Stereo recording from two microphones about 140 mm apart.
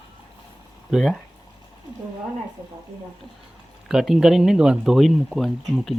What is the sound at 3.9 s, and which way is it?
Speech, centre (ahead or behind).